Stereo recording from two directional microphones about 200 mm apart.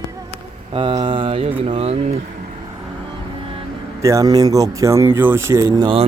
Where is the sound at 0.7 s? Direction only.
25° right (ahead or behind).